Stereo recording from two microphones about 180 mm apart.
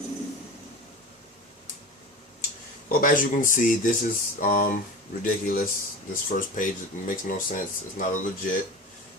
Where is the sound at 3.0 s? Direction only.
50° left (ahead or behind).